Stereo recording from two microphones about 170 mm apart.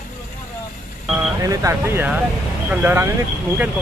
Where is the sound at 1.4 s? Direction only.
20° right (ahead or behind).